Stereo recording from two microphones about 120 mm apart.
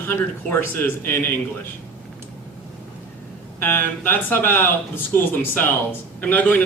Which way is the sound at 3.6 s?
15° left (ahead or behind).